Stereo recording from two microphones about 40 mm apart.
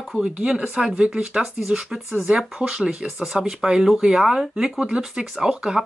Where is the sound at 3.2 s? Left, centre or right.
Centre.